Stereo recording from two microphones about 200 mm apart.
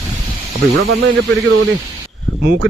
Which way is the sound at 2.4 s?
60° right (ahead or behind).